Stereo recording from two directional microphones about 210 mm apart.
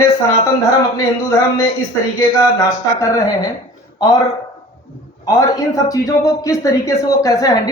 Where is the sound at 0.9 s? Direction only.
15° left (ahead or behind).